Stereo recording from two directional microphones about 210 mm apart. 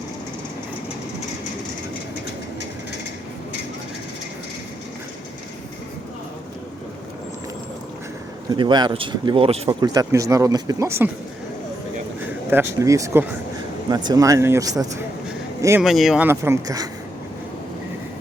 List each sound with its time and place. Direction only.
8.4 s speech: 20° right (ahead or behind)
12.5 s speech: 10° right (ahead or behind)
15.8 s speech: centre (ahead or behind); by 16.9 s 15° right (ahead or behind)